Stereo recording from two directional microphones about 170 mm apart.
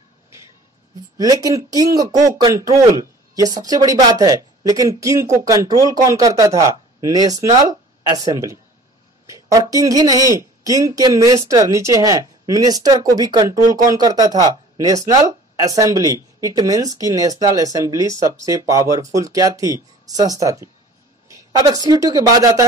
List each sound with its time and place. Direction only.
1.1 s a woman's voice: 20° right (ahead or behind)